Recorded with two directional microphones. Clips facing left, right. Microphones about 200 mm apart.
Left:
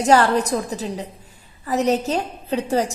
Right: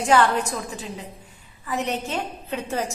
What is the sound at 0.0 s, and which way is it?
A woman's voice, 40° left (ahead or behind).